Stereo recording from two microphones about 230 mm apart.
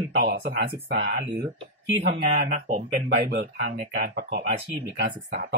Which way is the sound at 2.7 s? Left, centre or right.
Right.